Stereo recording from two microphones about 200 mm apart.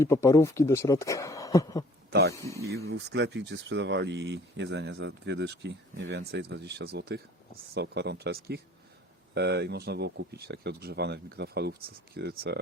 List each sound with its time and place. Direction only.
0.0 s speech: 15° left (ahead or behind)
2.8 s speech: 60° right (ahead or behind)